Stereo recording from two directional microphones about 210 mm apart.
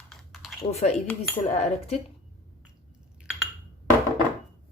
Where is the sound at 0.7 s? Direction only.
30° left (ahead or behind).